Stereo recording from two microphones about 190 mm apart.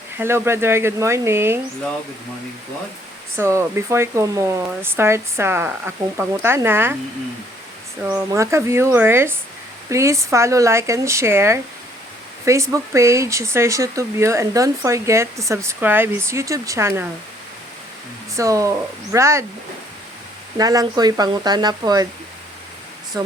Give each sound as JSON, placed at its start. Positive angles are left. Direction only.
{"t": 0.2, "sound": "speech", "side_deg": -15}
{"t": 3.3, "sound": "speech", "side_deg": -15}
{"t": 8.0, "sound": "speech", "side_deg": -10}
{"t": 18.3, "sound": "speech", "side_deg": -15}
{"t": 20.6, "sound": "speech", "side_deg": -20}
{"t": 23.1, "sound": "speech", "side_deg": -20}